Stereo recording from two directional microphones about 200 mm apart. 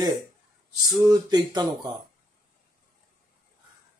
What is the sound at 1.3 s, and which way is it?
Speech, 20° right (ahead or behind).